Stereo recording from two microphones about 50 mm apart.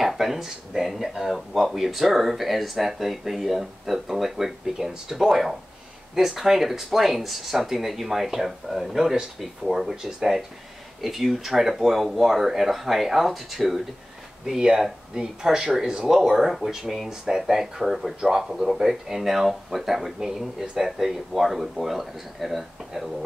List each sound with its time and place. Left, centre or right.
0.0 s speech: centre